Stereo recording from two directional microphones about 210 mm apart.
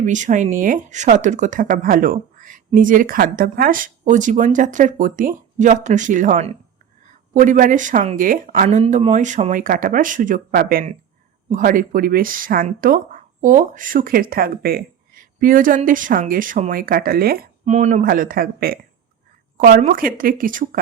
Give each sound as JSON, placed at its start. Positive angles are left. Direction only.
{"t": 0.0, "sound": "speech", "side_deg": -35}
{"t": 8.6, "sound": "speech", "side_deg": -30}